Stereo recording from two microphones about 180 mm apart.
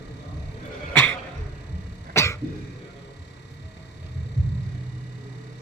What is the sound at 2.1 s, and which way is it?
Cough, 15° left (ahead or behind).